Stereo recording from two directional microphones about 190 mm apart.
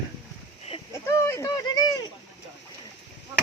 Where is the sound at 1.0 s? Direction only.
15° left (ahead or behind).